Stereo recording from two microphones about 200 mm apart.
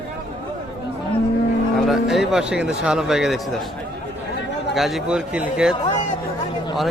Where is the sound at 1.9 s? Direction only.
Centre (ahead or behind).